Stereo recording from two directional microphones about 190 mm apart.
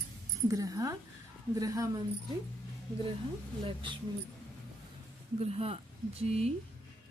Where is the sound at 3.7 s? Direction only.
25° right (ahead or behind).